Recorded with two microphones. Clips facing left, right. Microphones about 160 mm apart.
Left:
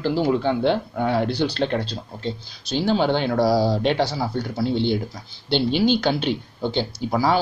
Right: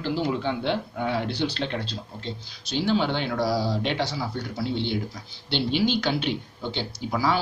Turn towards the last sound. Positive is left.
turn(degrees=35)  # may be behind; listen again after turning